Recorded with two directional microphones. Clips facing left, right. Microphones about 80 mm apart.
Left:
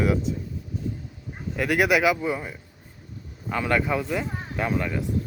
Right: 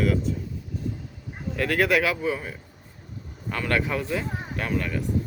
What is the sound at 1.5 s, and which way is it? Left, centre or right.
Speech, centre.